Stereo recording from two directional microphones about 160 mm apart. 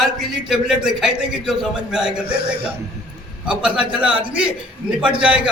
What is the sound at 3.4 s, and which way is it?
A man's voice, 5° right (ahead or behind).